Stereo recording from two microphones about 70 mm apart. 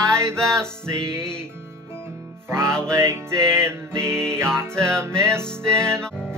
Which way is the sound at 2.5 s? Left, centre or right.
Right.